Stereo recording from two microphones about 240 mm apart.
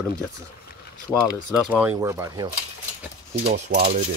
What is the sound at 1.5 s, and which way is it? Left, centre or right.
Speech, centre.